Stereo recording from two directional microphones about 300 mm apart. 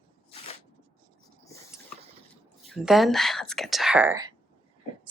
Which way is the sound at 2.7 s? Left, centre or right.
Centre.